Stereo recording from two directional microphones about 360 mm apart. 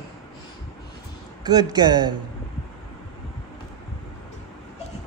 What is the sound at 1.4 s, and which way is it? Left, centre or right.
Speech, centre.